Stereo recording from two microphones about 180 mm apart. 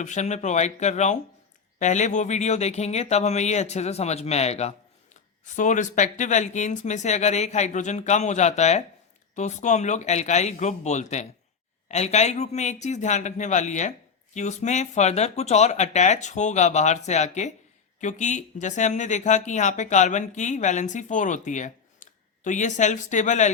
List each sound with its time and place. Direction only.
0.0 s speech: 40° left (ahead or behind)